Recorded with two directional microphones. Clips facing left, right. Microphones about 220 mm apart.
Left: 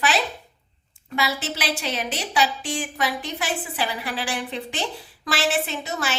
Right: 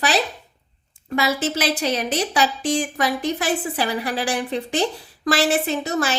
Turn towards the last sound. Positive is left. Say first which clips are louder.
# right 7 dB
turn(degrees=-45)  # may be behind; listen again after turning